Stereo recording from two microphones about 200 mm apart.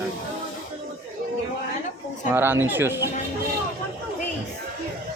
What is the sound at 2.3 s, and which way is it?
Speech, 10° right (ahead or behind).